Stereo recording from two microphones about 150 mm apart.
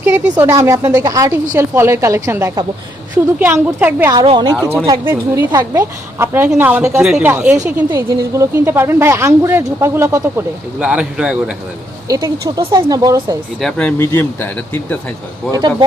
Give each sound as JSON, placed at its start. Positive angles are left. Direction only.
{"t": 0.0, "sound": "a woman's voice", "side_deg": -15}
{"t": 4.3, "sound": "a woman's voice", "side_deg": -30}
{"t": 10.8, "sound": "a woman's voice", "side_deg": -5}
{"t": 12.0, "sound": "a woman's voice", "side_deg": -25}
{"t": 13.6, "sound": "speech", "side_deg": 5}
{"t": 14.0, "sound": "speech", "side_deg": 15}